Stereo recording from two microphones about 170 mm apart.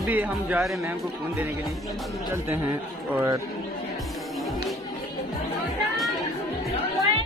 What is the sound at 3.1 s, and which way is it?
Speech, 15° right (ahead or behind).